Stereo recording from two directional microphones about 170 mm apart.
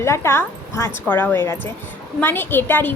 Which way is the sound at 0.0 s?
15° left (ahead or behind).